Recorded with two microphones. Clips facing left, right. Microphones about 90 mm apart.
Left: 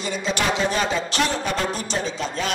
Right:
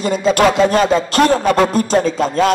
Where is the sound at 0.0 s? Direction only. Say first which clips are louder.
Right 11 dB; 45° right (ahead or behind).